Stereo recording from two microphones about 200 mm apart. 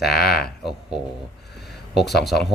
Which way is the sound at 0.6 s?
Centre (ahead or behind).